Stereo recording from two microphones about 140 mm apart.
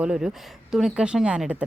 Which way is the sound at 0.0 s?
5° right (ahead or behind).